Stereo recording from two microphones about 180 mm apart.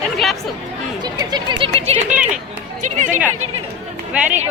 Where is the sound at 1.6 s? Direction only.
35° right (ahead or behind).